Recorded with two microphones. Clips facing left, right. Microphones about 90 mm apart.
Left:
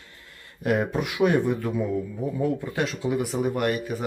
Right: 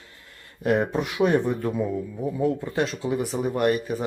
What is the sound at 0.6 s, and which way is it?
Speech, 25° right (ahead or behind).